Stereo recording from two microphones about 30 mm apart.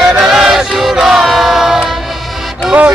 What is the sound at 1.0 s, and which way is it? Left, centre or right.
Music, centre.